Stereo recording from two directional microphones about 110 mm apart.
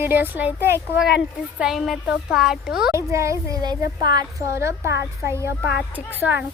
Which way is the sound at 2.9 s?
25° right (ahead or behind).